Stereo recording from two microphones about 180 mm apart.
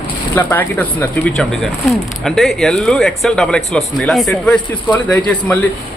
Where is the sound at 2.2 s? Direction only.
Centre (ahead or behind).